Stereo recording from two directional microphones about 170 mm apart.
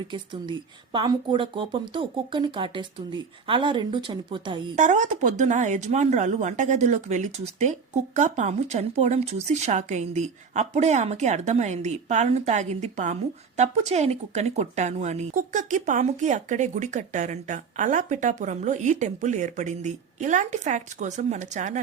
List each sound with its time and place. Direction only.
0.9 s speech: 30° right (ahead or behind)
4.7 s speech: 45° right (ahead or behind)